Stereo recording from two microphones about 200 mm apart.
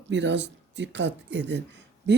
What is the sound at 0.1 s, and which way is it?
Speech, 60° right (ahead or behind).